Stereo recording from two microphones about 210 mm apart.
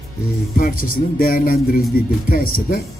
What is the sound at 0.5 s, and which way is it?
Speech, 45° left (ahead or behind).